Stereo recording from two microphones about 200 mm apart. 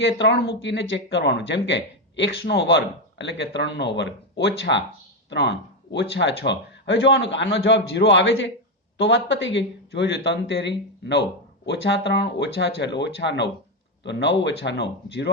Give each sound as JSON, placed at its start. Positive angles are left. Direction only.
{"t": 0.0, "sound": "speech", "side_deg": 60}